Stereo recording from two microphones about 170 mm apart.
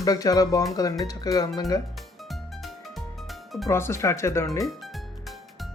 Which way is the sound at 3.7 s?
15° left (ahead or behind).